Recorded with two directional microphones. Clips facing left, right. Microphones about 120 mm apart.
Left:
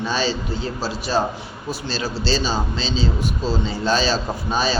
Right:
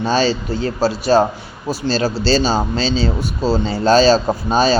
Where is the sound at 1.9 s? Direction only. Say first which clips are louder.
Right 7 dB; 40° right (ahead or behind).